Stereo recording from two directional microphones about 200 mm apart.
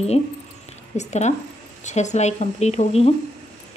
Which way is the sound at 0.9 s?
35° left (ahead or behind).